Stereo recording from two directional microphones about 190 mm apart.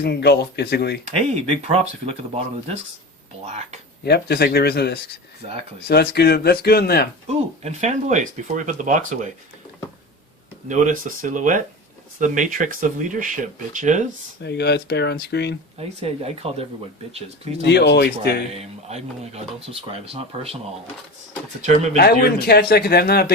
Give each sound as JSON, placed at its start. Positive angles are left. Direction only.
{"t": 0.0, "sound": "a man's voice", "side_deg": 60}
{"t": 1.0, "sound": "speech", "side_deg": -35}
{"t": 4.0, "sound": "a man's voice", "side_deg": 60}
{"t": 7.3, "sound": "speech", "side_deg": -35}
{"t": 10.7, "sound": "speech", "side_deg": -45}
{"t": 14.4, "sound": "a man's voice", "side_deg": 60}
{"t": 15.8, "sound": "speech", "side_deg": -30}
{"t": 17.7, "sound": "a man's voice", "side_deg": 65}
{"t": 18.5, "sound": "speech", "side_deg": -35}
{"t": 21.6, "sound": "speech", "side_deg": -40}
{"t": 21.9, "sound": "a man's voice", "side_deg": 55}